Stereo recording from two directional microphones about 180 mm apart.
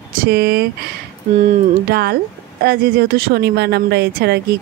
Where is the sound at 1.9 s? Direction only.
60° right (ahead or behind).